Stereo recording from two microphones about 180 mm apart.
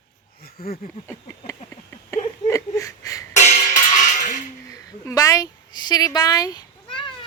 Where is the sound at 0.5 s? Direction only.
55° left (ahead or behind).